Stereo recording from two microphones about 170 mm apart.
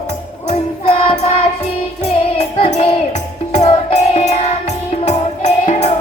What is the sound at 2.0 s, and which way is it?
Music, 40° left (ahead or behind).